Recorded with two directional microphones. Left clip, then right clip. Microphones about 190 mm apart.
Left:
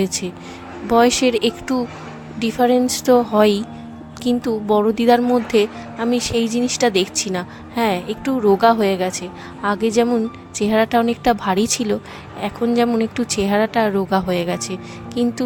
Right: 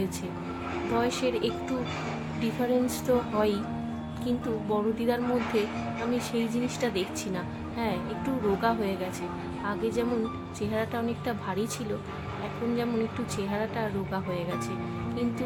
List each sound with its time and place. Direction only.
0.0 s a woman's voice: 55° left (ahead or behind)